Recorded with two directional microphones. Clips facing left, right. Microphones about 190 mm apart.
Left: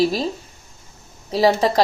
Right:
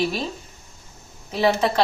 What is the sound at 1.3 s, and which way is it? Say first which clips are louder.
Speech: left 4 dB; 35° left (ahead or behind).